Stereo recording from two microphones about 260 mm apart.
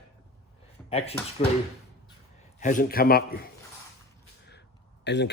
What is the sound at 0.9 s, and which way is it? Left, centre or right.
Speech, left.